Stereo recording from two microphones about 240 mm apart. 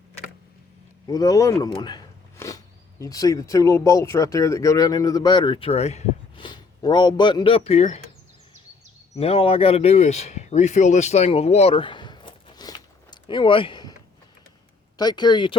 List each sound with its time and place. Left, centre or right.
1.0 s a sound: centre
3.0 s speech: centre
9.1 s speech: left
14.9 s speech: centre